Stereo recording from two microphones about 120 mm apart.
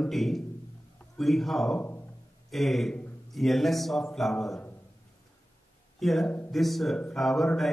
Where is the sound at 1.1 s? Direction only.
Centre (ahead or behind).